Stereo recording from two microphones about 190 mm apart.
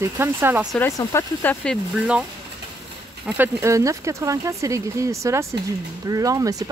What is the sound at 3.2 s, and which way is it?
Speech, 10° right (ahead or behind).